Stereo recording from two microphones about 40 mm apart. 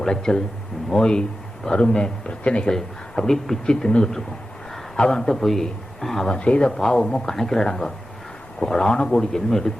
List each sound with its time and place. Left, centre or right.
0.0 s a man's voice: centre
1.6 s speech: left
2.6 s a man's voice: centre
3.7 s speech: centre
4.7 s a sound: centre
5.4 s a man's voice: centre
6.3 s speech: left
7.3 s a man's voice: centre